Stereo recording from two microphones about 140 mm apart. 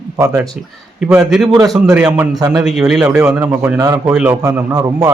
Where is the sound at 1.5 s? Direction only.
30° right (ahead or behind).